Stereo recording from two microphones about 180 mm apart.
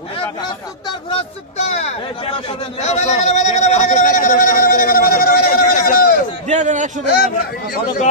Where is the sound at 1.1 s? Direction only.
35° left (ahead or behind).